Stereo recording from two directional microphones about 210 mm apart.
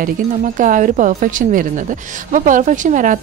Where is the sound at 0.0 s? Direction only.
40° right (ahead or behind).